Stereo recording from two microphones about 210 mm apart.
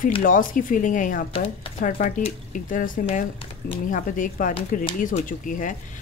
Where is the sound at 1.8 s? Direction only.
40° left (ahead or behind).